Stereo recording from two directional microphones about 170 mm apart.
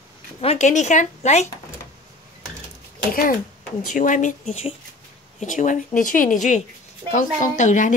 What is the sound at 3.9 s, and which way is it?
Speech, 50° left (ahead or behind).